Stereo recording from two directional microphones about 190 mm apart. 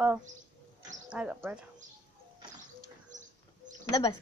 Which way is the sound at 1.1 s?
5° right (ahead or behind).